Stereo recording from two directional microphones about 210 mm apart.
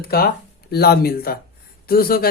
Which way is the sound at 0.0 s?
45° left (ahead or behind).